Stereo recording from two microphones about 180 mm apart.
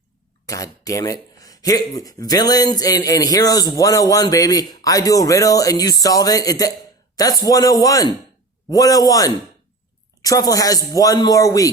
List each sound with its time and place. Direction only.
0.4 s speech: 20° left (ahead or behind)